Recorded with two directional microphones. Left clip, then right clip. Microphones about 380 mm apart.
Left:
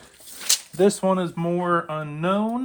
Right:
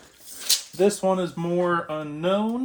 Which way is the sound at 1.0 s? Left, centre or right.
Left.